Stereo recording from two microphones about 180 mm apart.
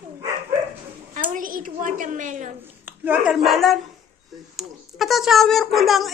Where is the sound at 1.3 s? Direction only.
50° right (ahead or behind).